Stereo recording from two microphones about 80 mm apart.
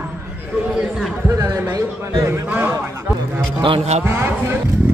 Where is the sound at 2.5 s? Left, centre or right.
Right.